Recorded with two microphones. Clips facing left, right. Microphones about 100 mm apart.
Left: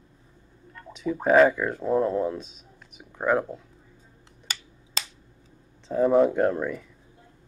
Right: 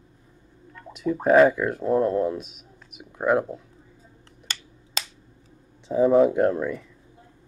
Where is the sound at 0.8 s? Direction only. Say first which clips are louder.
Right 3 dB; centre (ahead or behind).